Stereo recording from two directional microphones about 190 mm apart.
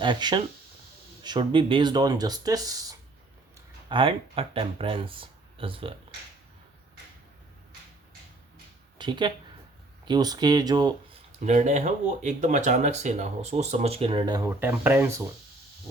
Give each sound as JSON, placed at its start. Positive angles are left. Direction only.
{"t": 0.0, "sound": "speech", "side_deg": -25}
{"t": 3.8, "sound": "speech", "side_deg": -30}
{"t": 9.0, "sound": "speech", "side_deg": -25}
{"t": 11.4, "sound": "speech", "side_deg": -40}